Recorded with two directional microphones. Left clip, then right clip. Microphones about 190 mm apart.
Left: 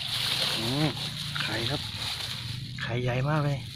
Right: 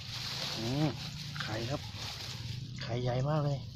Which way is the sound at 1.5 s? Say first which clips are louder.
Left 8 dB; centre (ahead or behind).